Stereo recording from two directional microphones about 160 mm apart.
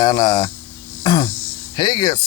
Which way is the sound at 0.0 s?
25° left (ahead or behind).